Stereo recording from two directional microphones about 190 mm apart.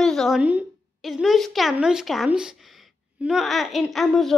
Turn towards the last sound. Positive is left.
turn(degrees=0)  # may be behind; listen again after turning